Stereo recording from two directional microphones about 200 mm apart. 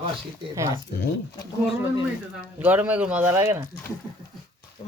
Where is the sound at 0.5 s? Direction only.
15° right (ahead or behind).